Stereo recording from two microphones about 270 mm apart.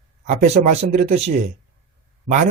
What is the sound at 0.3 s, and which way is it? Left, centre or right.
Speech, right.